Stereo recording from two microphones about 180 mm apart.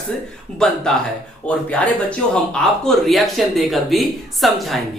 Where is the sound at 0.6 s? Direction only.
5° left (ahead or behind).